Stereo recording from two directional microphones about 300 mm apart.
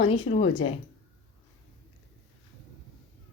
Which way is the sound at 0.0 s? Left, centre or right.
Left.